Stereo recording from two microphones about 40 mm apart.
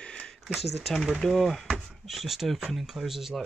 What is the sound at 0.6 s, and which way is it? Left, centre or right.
Speech, centre.